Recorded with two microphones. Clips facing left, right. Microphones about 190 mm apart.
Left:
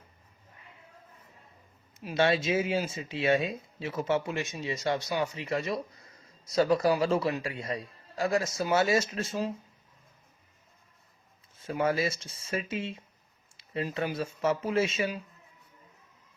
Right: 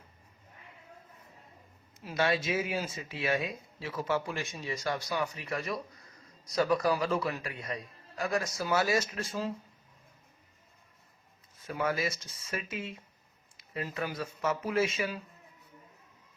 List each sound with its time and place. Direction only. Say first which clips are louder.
2.1 s speech: left 4 dB; 25° left (ahead or behind)
11.6 s speech: left 4 dB; 30° left (ahead or behind)